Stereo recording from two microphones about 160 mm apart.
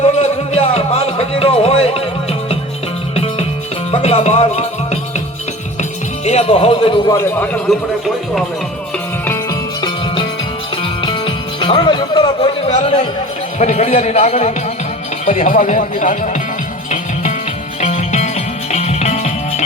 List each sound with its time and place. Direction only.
0.0 s music: 40° left (ahead or behind)
3.9 s music: 40° left (ahead or behind)
6.2 s speech: 40° left (ahead or behind)
7.1 s a man's voice: 10° left (ahead or behind)
11.0 s speech: 30° left (ahead or behind); by 16.3 s 55° left (ahead or behind)
17.7 s music: 45° left (ahead or behind)